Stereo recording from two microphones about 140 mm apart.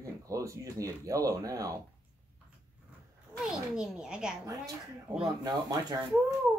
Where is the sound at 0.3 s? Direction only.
25° right (ahead or behind).